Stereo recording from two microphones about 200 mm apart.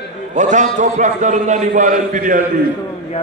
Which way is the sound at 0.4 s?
40° right (ahead or behind).